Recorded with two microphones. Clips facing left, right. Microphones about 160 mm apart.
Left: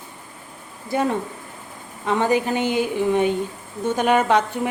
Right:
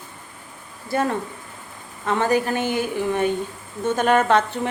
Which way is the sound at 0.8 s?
15° left (ahead or behind).